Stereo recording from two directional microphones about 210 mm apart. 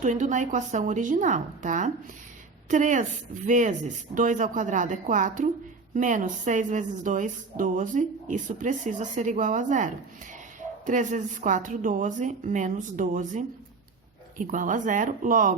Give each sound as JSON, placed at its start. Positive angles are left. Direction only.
{"t": 0.0, "sound": "a woman's voice", "side_deg": -35}